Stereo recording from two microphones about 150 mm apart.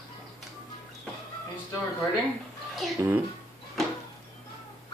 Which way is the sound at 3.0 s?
15° right (ahead or behind).